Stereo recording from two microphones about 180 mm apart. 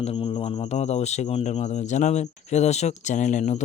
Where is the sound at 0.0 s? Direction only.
30° left (ahead or behind).